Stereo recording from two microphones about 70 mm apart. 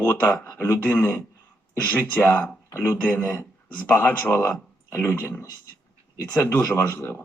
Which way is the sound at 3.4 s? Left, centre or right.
Left.